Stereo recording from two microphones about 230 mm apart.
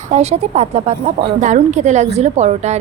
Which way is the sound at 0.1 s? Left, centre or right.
Right.